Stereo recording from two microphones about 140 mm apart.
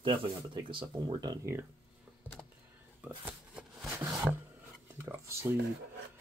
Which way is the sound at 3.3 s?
5° right (ahead or behind).